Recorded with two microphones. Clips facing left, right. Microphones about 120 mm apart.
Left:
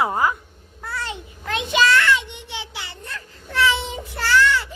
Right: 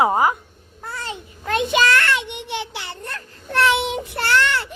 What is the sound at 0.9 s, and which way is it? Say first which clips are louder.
Child singing: left 2 dB; 40° right (ahead or behind).